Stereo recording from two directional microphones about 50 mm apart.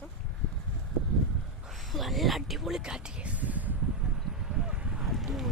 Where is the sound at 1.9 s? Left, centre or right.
Centre.